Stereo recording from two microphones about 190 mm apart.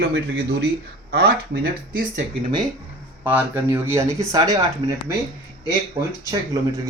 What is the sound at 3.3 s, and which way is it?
Speech, 10° right (ahead or behind).